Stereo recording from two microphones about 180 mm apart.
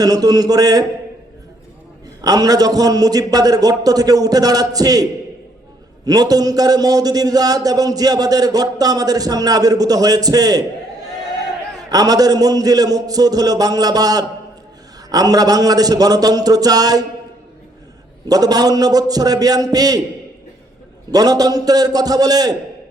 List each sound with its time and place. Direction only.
0.0 s a man's voice: 20° right (ahead or behind)
2.2 s a man's voice: 20° right (ahead or behind)
6.1 s a man's voice: 20° right (ahead or behind)
11.9 s a man's voice: 20° right (ahead or behind)
18.3 s a man's voice: 20° right (ahead or behind)
21.1 s a man's voice: 20° right (ahead or behind)